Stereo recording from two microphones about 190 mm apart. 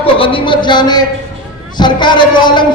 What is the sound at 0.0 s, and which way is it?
A man's voice, 30° left (ahead or behind).